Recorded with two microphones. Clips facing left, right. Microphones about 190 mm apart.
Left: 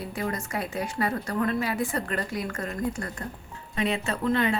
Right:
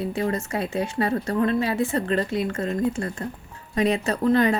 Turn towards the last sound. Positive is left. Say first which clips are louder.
# right 5 dB
turn(degrees=-40)  # may be behind; listen again after turning